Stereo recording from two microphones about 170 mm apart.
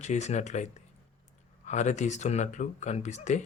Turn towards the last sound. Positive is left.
turn(degrees=45)  # may be behind; listen again after turning